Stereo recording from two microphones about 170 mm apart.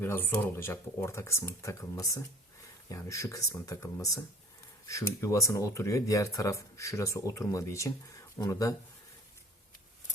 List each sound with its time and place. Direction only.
0.0 s speech: 10° left (ahead or behind)